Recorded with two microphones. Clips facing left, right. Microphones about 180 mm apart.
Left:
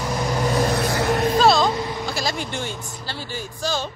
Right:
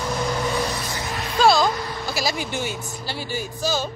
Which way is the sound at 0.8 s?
70° left (ahead or behind).